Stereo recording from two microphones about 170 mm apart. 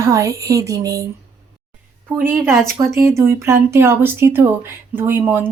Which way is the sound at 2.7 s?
15° right (ahead or behind).